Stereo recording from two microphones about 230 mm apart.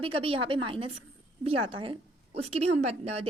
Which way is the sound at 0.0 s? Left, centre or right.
Right.